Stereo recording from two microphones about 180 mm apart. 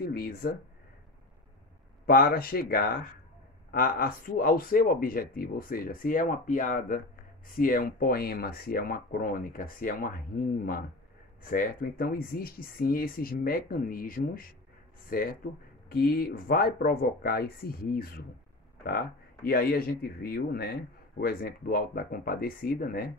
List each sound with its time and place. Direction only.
0.0 s speech: 55° left (ahead or behind)
2.0 s speech: 55° left (ahead or behind)